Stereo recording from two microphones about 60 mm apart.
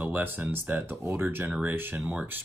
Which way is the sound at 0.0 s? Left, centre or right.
Right.